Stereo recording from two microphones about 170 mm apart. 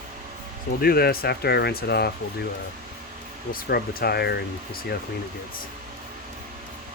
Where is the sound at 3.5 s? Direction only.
65° left (ahead or behind).